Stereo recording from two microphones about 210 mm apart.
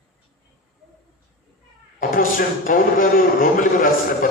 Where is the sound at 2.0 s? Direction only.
40° left (ahead or behind).